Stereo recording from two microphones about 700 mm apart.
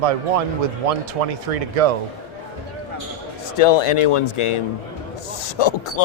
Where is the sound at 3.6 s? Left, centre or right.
Left.